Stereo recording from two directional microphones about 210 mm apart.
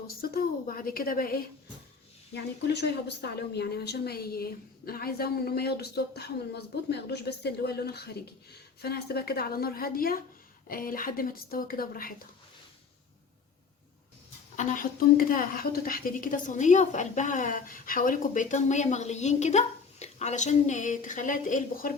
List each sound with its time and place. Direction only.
0.2 s speech: 45° left (ahead or behind)
14.5 s a woman's voice: 35° left (ahead or behind)